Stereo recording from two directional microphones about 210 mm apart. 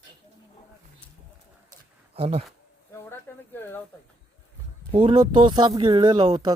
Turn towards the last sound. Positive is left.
turn(degrees=-20)  # may be behind; listen again after turning